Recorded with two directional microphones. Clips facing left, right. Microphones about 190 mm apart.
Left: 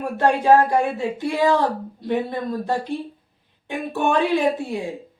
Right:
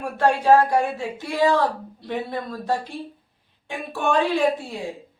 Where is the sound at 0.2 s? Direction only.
20° left (ahead or behind).